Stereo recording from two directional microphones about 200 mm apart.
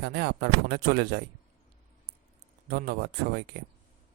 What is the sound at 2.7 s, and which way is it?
Speech, 50° right (ahead or behind).